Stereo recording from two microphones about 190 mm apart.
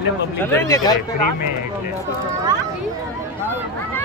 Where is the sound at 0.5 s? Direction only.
20° left (ahead or behind).